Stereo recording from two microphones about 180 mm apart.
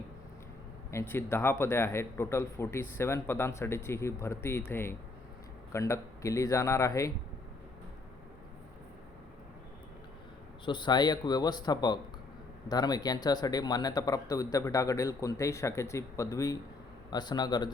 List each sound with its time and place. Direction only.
0.9 s speech: 15° left (ahead or behind)
10.7 s speech: 25° left (ahead or behind)